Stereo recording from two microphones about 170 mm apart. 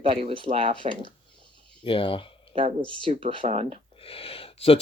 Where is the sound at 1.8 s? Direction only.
30° left (ahead or behind).